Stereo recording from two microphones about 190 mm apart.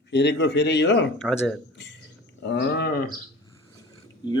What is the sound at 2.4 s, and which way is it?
Speech, 65° left (ahead or behind).